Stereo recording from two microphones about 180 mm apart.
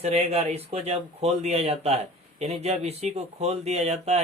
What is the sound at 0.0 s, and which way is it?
Speech, 35° right (ahead or behind).